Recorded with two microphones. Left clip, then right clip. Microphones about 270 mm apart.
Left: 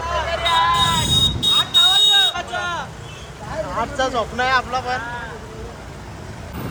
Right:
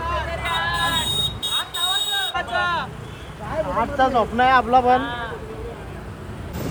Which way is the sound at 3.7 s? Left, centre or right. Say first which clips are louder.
Right 2 dB; centre.